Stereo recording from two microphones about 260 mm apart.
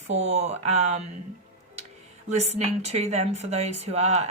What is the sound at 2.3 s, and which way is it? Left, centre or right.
Speech, right.